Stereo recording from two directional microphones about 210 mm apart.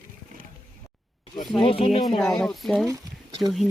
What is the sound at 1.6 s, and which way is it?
Speech, 25° left (ahead or behind).